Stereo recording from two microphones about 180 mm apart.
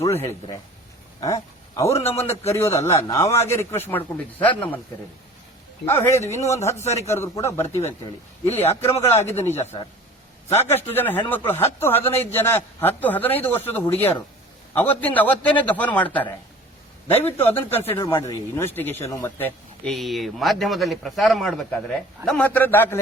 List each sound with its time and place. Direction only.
0.0 s a man's voice: 15° left (ahead or behind)
5.8 s a man's voice: 15° left (ahead or behind)
9.7 s a man's voice: 25° left (ahead or behind)
10.5 s a man's voice: 15° left (ahead or behind)